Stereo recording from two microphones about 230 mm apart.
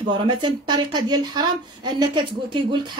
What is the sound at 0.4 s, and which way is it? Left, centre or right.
A woman's voice, centre.